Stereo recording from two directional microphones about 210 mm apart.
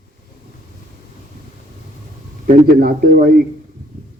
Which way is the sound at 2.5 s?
45° right (ahead or behind).